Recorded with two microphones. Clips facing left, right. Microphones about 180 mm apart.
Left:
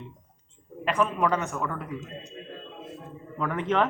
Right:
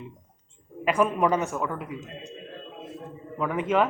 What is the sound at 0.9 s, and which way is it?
Speech, 10° right (ahead or behind).